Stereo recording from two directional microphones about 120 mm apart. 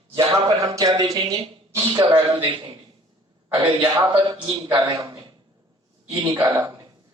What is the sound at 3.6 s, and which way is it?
Speech, 30° right (ahead or behind).